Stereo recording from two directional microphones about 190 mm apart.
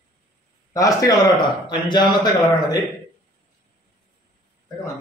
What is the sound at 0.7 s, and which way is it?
Speech, 20° left (ahead or behind).